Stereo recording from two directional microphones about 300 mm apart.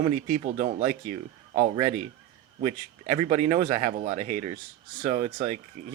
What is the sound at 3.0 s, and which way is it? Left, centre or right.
A man's voice, right.